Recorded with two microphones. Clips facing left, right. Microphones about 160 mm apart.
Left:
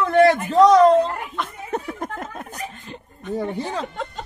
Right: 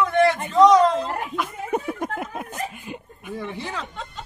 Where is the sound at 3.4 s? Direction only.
40° left (ahead or behind).